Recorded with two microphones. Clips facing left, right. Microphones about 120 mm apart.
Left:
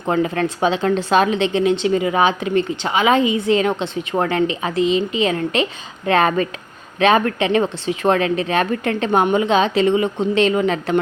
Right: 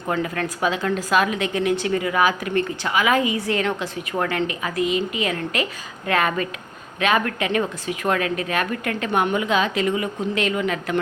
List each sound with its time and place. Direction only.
0.1 s a woman's voice: 25° left (ahead or behind)